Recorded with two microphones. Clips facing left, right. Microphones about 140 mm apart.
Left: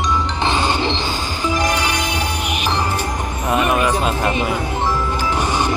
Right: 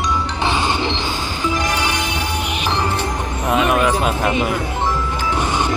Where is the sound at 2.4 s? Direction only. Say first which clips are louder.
Left 1 dB; 15° left (ahead or behind).